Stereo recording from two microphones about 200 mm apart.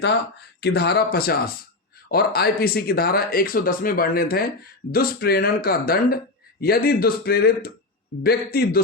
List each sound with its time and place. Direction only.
0.6 s speech: 55° left (ahead or behind)